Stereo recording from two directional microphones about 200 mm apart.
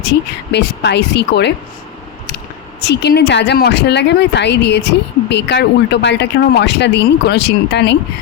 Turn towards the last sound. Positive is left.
turn(degrees=60)  # may be behind; listen again after turning